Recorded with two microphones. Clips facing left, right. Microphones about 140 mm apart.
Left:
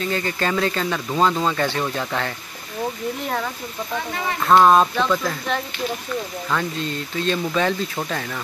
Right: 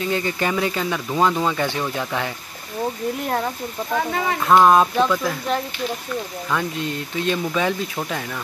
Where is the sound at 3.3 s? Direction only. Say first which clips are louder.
Right 3 dB; 30° right (ahead or behind).